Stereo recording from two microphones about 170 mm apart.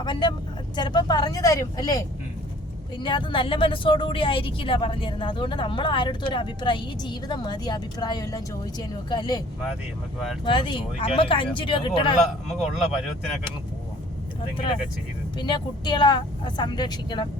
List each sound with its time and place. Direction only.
0.0 s speech: 25° left (ahead or behind)
10.4 s speech: 30° left (ahead or behind)
12.5 s speech: centre (ahead or behind)
15.4 s speech: 25° left (ahead or behind)